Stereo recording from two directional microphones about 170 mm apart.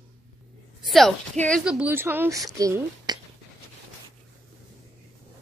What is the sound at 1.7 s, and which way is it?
Speech, 10° right (ahead or behind).